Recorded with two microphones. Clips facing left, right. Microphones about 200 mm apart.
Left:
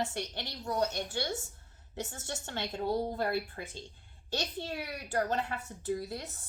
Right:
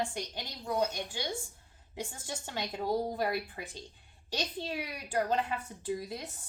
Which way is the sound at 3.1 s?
15° right (ahead or behind).